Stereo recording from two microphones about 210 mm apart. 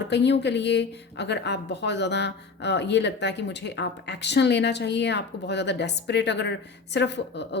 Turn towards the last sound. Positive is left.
turn(degrees=55)  # may be behind; listen again after turning